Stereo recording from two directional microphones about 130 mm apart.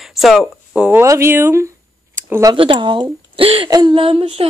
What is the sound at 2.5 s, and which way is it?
Speech, 40° right (ahead or behind).